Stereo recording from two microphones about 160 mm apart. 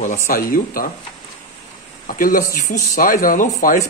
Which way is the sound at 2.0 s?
60° left (ahead or behind).